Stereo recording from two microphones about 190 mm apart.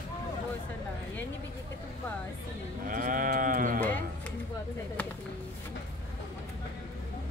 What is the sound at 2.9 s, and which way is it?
Sheep, 45° right (ahead or behind).